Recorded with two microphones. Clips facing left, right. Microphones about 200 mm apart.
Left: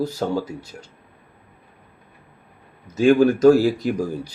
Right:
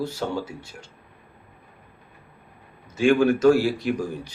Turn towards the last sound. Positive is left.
turn(degrees=40)  # may be behind; listen again after turning